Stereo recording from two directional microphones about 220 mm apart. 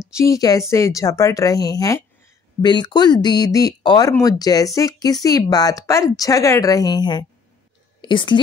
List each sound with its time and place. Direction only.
0.1 s speech: 15° left (ahead or behind)